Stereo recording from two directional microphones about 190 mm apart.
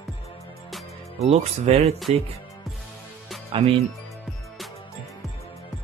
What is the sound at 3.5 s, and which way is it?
Speech, 30° right (ahead or behind).